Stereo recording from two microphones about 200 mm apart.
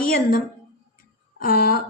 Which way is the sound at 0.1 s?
45° left (ahead or behind).